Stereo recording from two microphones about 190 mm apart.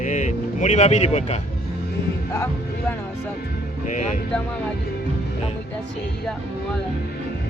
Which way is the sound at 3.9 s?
40° left (ahead or behind).